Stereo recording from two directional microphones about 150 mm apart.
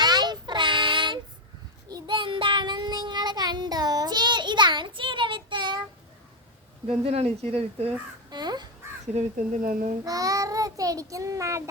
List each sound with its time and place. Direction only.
0.0 s child singing: 30° right (ahead or behind)
6.8 s speech: 40° right (ahead or behind)
8.3 s crow: 30° right (ahead or behind)
9.1 s speech: 55° right (ahead or behind)
10.0 s child singing: 25° right (ahead or behind)